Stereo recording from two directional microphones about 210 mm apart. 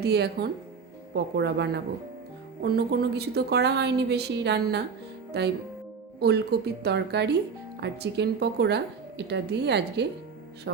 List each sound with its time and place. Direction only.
0.0 s a woman's voice: 50° right (ahead or behind)
6.1 s a woman's voice: 50° right (ahead or behind)